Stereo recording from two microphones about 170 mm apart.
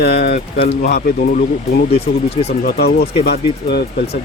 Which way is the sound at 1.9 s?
35° left (ahead or behind).